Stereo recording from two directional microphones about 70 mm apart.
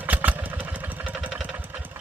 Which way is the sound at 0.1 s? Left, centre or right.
Right.